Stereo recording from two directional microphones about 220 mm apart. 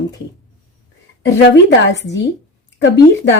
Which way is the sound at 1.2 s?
55° left (ahead or behind).